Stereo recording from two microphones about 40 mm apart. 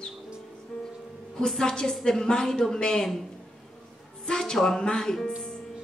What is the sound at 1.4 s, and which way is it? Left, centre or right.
A woman's voice, centre.